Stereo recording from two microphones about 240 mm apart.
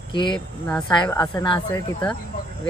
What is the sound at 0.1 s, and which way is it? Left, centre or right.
Speech, centre.